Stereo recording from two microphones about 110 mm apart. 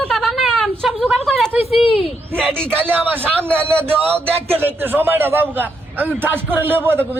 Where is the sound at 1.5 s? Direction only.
60° left (ahead or behind).